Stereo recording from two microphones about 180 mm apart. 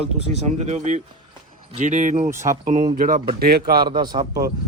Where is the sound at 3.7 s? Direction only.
25° right (ahead or behind).